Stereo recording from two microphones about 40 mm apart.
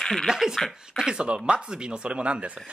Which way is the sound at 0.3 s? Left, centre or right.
Centre.